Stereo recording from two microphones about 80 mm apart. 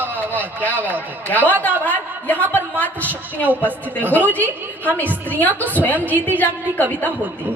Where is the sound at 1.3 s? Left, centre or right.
Centre.